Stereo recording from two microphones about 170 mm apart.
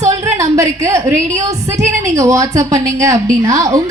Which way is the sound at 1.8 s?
45° right (ahead or behind).